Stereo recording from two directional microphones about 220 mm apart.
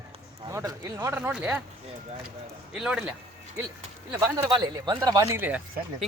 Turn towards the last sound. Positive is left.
turn(degrees=-5)  # may be behind; listen again after turning